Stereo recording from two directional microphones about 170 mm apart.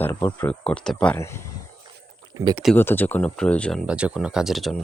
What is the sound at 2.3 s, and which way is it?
Speech, 25° right (ahead or behind).